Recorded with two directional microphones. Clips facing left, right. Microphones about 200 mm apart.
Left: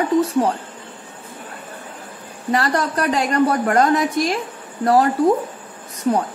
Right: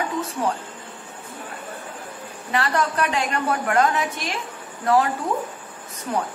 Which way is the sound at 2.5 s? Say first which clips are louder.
Left 3 dB; 40° left (ahead or behind).